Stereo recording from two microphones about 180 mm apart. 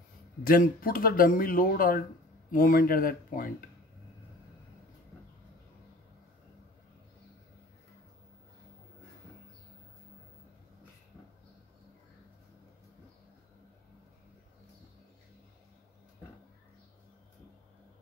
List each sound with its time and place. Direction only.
0.4 s speech: 55° left (ahead or behind)